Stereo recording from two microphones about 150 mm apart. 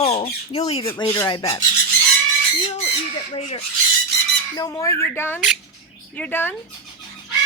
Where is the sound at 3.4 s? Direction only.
45° left (ahead or behind).